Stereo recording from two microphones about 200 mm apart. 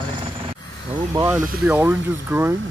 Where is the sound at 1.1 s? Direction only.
10° right (ahead or behind).